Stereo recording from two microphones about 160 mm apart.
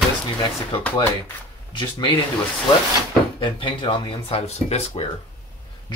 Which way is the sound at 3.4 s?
30° left (ahead or behind).